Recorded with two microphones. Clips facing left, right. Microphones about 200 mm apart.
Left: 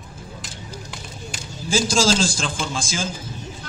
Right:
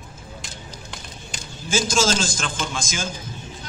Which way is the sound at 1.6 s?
35° left (ahead or behind).